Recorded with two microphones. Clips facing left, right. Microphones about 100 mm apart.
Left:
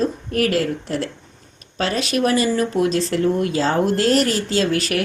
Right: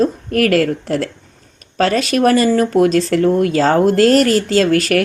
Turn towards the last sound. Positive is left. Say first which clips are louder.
# right 6 dB
turn(degrees=-55)  # may be behind; listen again after turning